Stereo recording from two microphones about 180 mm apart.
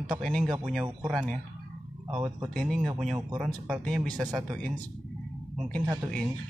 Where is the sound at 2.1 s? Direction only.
15° right (ahead or behind).